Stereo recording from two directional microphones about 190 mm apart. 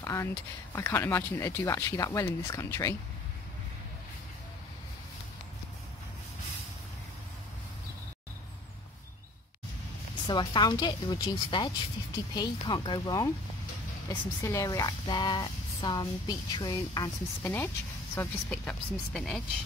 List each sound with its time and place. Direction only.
0.0 s a sound: 15° left (ahead or behind)
0.7 s speech: 15° left (ahead or behind)
10.2 s speech: 25° left (ahead or behind); by 19.4 s centre (ahead or behind)